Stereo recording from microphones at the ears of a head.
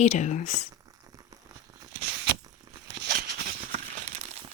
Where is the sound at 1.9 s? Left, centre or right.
Right.